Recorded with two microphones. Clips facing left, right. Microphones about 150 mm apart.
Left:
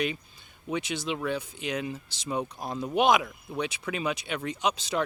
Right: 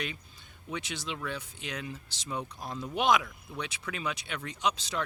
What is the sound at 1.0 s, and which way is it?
Speech, 15° left (ahead or behind).